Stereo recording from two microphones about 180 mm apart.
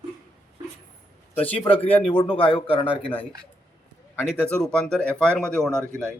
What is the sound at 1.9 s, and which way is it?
Speech, 10° left (ahead or behind).